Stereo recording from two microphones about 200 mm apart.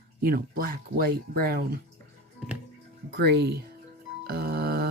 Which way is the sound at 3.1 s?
55° right (ahead or behind).